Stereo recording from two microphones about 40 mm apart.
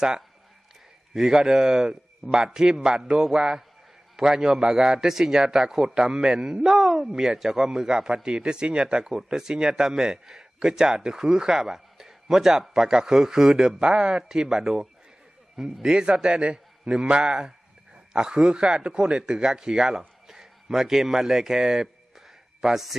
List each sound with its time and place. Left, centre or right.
1.1 s a man's voice: centre